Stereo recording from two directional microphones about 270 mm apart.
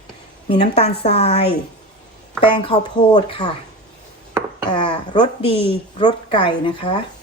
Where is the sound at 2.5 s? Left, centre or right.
Centre.